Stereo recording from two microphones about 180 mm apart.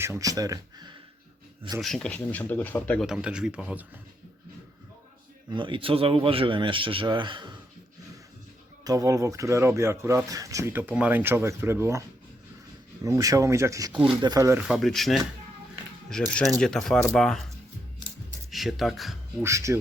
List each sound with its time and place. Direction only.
0.0 s a man's voice: 15° right (ahead or behind)
1.8 s speech: 5° left (ahead or behind)
3.1 s speech: 5° right (ahead or behind)
5.5 s a man's voice: 25° right (ahead or behind)
8.8 s speech: 20° right (ahead or behind)
13.1 s speech: 15° right (ahead or behind)
14.6 s speech: centre (ahead or behind)
18.5 s speech: centre (ahead or behind)
19.4 s speech: 15° right (ahead or behind)